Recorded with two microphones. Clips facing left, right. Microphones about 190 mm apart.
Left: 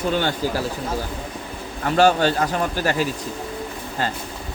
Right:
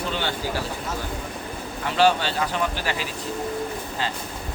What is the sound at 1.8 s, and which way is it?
Speech, 45° left (ahead or behind).